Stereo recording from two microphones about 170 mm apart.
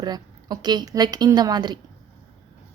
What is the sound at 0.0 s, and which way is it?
Speech, 25° right (ahead or behind).